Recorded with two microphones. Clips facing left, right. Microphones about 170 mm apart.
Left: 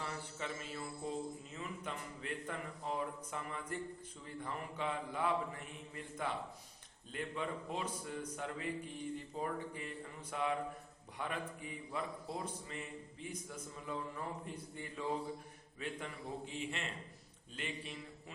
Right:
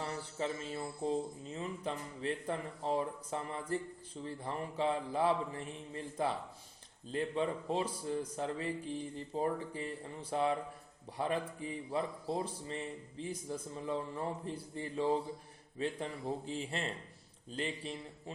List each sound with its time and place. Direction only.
0.0 s mantra: 35° right (ahead or behind)
1.5 s speech: 30° right (ahead or behind)